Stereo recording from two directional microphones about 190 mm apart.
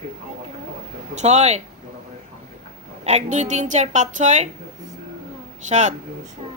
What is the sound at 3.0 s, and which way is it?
A woman's voice, 35° right (ahead or behind).